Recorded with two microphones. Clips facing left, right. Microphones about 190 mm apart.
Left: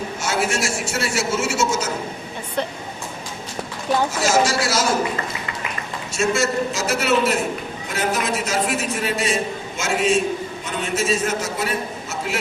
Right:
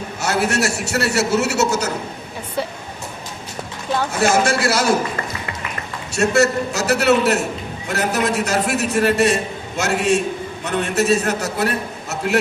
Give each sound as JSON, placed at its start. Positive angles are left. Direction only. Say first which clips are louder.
{"t": 0.2, "sound": "a man's voice", "louder": "right 4 dB", "side_deg": -65}
{"t": 4.2, "sound": "a man's voice", "louder": "right 6 dB", "side_deg": -55}
{"t": 6.1, "sound": "a man's voice", "louder": "right 4 dB", "side_deg": -65}